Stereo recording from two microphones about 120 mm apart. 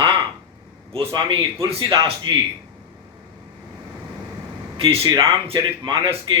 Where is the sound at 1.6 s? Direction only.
50° right (ahead or behind).